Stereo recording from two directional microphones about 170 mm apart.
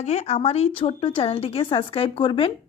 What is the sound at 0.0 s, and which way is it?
Speech, 40° left (ahead or behind).